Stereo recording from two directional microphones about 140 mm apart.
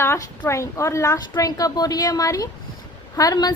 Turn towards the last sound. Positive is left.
turn(degrees=25)  # may be behind; listen again after turning